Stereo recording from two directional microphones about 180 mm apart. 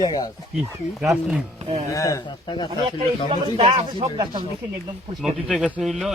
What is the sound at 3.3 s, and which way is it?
Speech, 35° right (ahead or behind).